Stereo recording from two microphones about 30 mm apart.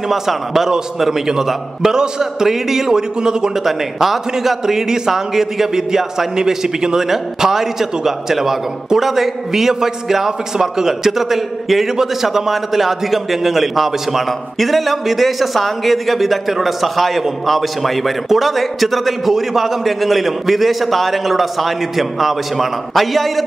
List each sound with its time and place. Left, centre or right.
0.1 s a man's voice: centre
3.2 s a man's voice: right
3.6 s a man's voice: centre